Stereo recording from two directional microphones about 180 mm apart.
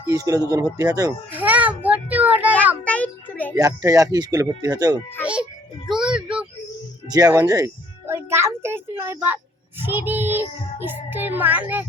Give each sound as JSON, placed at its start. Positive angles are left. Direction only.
{"t": 0.1, "sound": "children playing", "side_deg": -20}
{"t": 2.8, "sound": "a sound", "side_deg": 10}
{"t": 3.5, "sound": "speech", "side_deg": -15}
{"t": 5.2, "sound": "music", "side_deg": -5}
{"t": 7.1, "sound": "music", "side_deg": -20}
{"t": 9.8, "sound": "speech", "side_deg": -10}